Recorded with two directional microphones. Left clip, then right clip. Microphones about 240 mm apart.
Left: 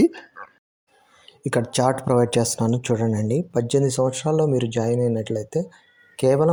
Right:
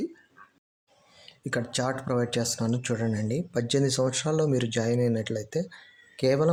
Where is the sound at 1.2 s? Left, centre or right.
Left.